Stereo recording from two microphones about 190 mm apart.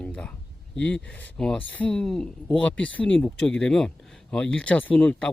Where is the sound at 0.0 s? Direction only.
5° left (ahead or behind).